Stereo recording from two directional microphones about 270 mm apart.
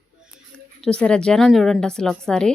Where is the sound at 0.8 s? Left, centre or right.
Centre.